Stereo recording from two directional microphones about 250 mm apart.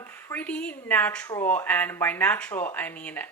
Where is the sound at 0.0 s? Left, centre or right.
Centre.